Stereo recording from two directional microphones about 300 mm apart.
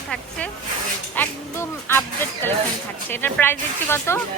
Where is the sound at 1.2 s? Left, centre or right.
Centre.